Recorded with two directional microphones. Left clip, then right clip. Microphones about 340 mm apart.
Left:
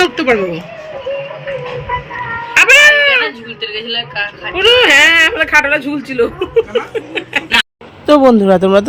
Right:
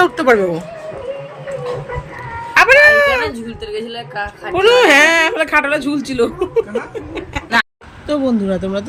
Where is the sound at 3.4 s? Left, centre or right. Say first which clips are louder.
Left 4 dB; right.